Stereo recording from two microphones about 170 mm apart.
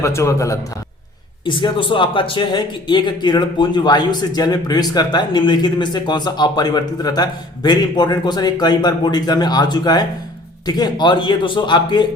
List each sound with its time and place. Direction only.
0.0 s a man's voice: 15° left (ahead or behind)
1.5 s speech: 30° left (ahead or behind)